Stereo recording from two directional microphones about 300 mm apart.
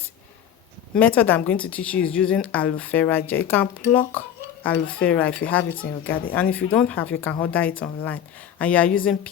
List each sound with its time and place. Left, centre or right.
0.9 s speech: centre
5.8 s speech: left
6.3 s speech: centre